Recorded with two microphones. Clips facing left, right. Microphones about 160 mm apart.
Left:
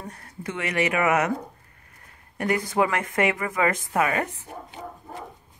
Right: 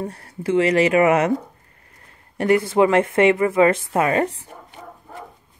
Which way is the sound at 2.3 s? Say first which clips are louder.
Right 7 dB; 30° right (ahead or behind).